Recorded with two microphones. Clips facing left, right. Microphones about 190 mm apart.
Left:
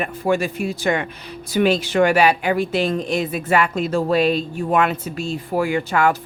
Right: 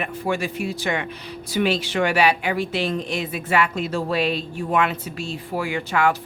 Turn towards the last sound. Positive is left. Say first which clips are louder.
# left 3 dB
turn(degrees=45)  # may be behind; listen again after turning